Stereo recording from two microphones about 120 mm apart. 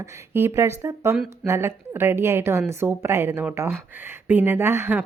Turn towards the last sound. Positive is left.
turn(degrees=-15)  # may be behind; listen again after turning